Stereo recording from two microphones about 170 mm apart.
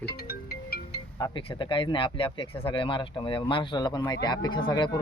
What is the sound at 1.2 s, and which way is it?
Speech, 30° left (ahead or behind).